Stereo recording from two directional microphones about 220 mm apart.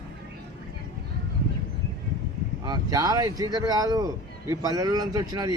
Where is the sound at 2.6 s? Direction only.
15° right (ahead or behind).